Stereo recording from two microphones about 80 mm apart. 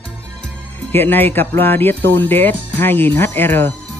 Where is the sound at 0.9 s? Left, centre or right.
Left.